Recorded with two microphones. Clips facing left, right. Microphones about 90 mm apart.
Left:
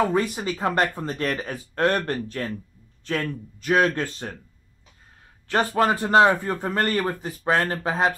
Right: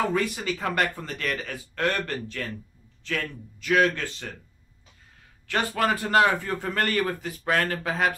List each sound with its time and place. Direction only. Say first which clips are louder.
0.0 s a man's voice: left 3 dB; 35° left (ahead or behind)
5.5 s a man's voice: left 4 dB; 30° left (ahead or behind)